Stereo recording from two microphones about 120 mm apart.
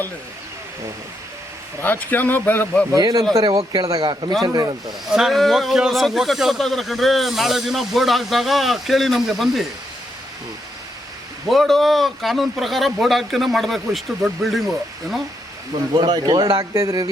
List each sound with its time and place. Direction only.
1.8 s speech: 15° left (ahead or behind)
2.9 s speech: 35° right (ahead or behind)
4.9 s a man's voice: centre (ahead or behind)
11.4 s a man's voice: centre (ahead or behind)
16.0 s speech: 35° right (ahead or behind)